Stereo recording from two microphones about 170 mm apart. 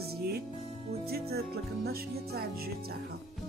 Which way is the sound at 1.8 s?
65° right (ahead or behind).